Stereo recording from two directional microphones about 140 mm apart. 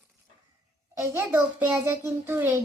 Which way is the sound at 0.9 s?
15° right (ahead or behind).